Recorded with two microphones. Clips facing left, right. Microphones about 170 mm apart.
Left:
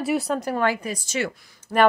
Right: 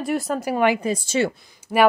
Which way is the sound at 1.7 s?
10° right (ahead or behind).